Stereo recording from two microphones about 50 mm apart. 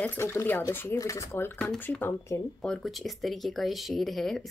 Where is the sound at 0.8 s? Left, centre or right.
Left.